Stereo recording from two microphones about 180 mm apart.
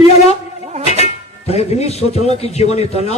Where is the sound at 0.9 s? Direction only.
35° left (ahead or behind).